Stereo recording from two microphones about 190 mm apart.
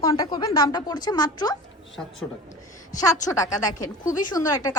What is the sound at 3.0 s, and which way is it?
A woman's voice, 20° left (ahead or behind).